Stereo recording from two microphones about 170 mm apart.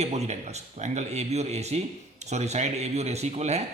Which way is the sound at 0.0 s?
40° right (ahead or behind).